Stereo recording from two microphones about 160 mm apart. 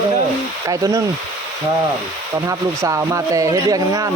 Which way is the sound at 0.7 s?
20° right (ahead or behind).